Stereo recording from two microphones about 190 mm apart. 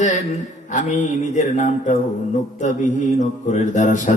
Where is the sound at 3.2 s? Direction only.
40° left (ahead or behind).